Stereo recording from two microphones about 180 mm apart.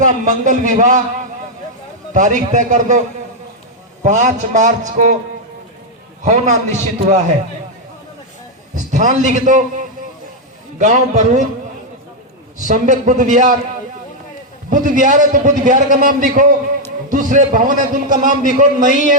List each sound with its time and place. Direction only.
0.3 s a man's voice: 45° right (ahead or behind)
2.1 s a man's voice: 45° right (ahead or behind)
4.0 s a man's voice: 45° right (ahead or behind)
6.2 s a man's voice: 40° right (ahead or behind)
8.7 s a man's voice: 45° right (ahead or behind)
12.6 s a man's voice: 45° right (ahead or behind)
14.7 s a man's voice: 50° right (ahead or behind)